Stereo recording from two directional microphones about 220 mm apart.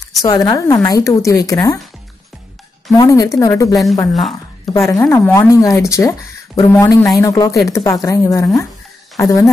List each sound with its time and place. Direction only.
0.2 s speech: 15° left (ahead or behind)
2.9 s speech: 15° left (ahead or behind)